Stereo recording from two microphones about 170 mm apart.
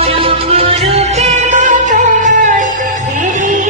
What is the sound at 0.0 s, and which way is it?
Music, 35° right (ahead or behind).